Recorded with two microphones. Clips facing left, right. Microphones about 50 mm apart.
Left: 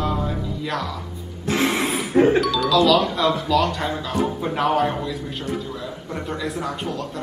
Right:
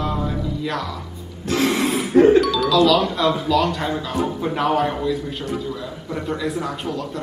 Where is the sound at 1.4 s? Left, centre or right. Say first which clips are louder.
Right 1 dB; left.